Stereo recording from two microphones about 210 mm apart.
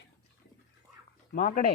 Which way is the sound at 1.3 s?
35° left (ahead or behind).